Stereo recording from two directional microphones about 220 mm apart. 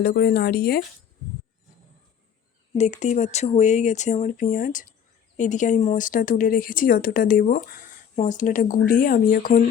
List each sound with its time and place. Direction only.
0.0 s speech: 45° left (ahead or behind)
2.7 s speech: 30° left (ahead or behind)